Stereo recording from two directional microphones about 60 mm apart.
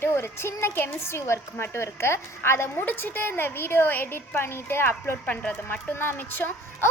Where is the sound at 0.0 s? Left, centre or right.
Left.